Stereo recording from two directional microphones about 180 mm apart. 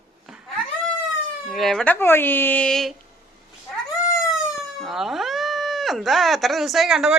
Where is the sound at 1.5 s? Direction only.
Centre (ahead or behind).